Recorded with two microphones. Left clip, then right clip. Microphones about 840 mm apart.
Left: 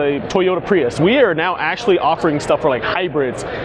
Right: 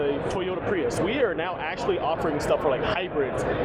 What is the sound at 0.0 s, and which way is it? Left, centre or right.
Speech, left.